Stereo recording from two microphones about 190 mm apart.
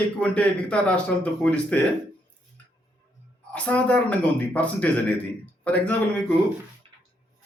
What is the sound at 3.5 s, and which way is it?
Speech, 5° left (ahead or behind).